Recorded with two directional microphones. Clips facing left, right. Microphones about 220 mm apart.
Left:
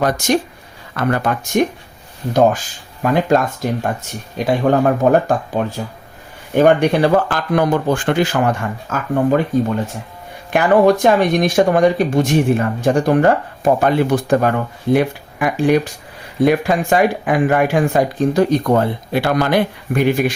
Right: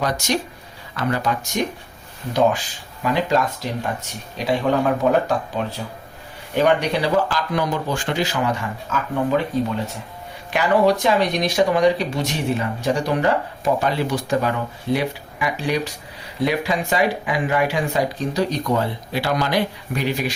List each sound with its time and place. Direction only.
0.0 s speech: 50° left (ahead or behind)